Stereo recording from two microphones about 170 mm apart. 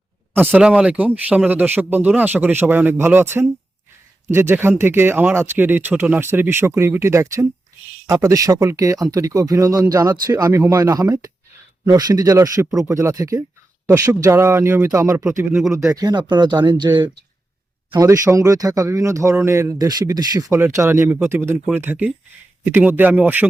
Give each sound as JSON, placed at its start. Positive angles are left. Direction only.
{"t": 0.3, "sound": "speech", "side_deg": -10}